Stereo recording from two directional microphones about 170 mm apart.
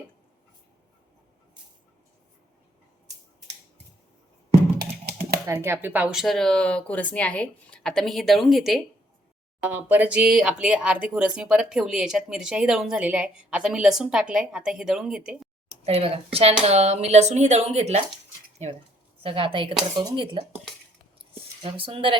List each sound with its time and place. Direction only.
5.5 s speech: 15° right (ahead or behind)
15.7 s speech: 35° right (ahead or behind)
19.2 s speech: 35° right (ahead or behind)
20.1 s dishes: 30° right (ahead or behind)
21.3 s speech: 30° right (ahead or behind)